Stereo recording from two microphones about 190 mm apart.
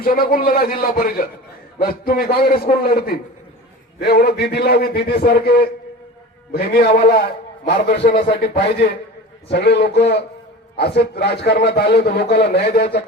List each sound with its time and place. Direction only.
0.0 s a man's voice: 50° left (ahead or behind)